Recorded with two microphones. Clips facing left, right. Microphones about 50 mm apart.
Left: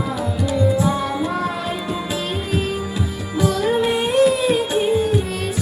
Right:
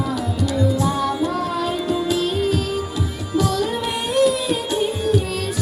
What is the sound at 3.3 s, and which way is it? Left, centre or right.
Singing, left.